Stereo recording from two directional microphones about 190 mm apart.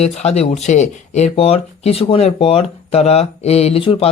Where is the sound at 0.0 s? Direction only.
35° left (ahead or behind).